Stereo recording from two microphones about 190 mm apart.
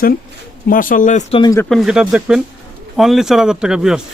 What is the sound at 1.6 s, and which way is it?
Speech, centre (ahead or behind).